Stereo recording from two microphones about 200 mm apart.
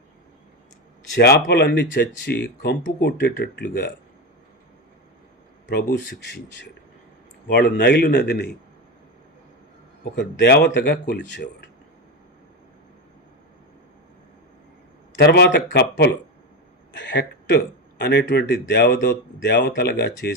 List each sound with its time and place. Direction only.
1.2 s speech: 55° left (ahead or behind)
5.6 s speech: 65° left (ahead or behind)
10.2 s speech: 55° left (ahead or behind)
15.1 s speech: 55° left (ahead or behind)